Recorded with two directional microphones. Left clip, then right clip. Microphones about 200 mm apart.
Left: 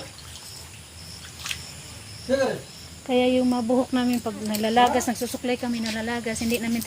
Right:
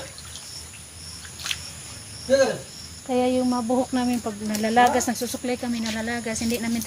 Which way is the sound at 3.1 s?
40° left (ahead or behind).